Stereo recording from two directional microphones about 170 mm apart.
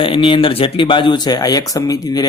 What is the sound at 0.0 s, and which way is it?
Speech, 30° left (ahead or behind).